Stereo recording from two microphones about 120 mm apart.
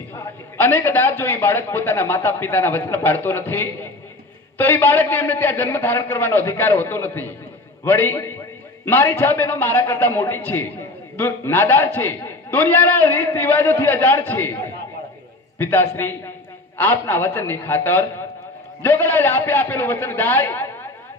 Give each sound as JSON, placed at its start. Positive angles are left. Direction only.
{"t": 0.1, "sound": "a man's voice", "side_deg": 15}